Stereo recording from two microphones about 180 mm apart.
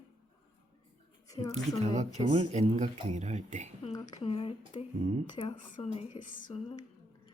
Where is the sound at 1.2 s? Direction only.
20° left (ahead or behind).